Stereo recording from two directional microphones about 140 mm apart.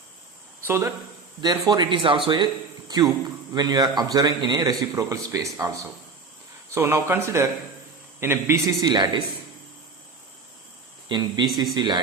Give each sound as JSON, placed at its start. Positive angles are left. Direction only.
{"t": 0.6, "sound": "speech", "side_deg": -20}
{"t": 1.4, "sound": "a man's voice", "side_deg": -30}
{"t": 11.1, "sound": "a man's voice", "side_deg": -30}